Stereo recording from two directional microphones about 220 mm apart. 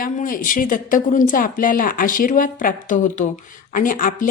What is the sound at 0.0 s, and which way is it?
Speech, 40° left (ahead or behind).